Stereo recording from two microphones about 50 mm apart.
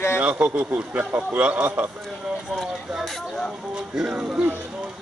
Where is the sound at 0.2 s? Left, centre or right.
Right.